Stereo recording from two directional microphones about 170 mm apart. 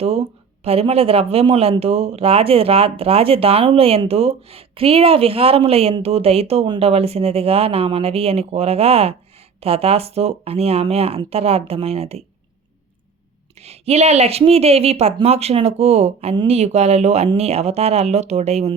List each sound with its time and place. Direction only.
0.0 s speech: 35° right (ahead or behind)
13.6 s speech: 40° right (ahead or behind)